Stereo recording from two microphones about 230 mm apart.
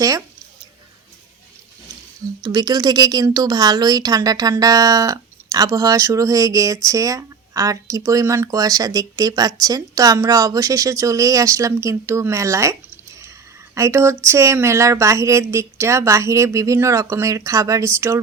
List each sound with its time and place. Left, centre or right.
2.4 s speech: centre
13.7 s speech: centre